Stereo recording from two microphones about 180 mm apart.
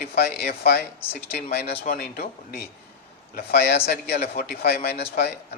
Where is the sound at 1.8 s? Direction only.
55° left (ahead or behind).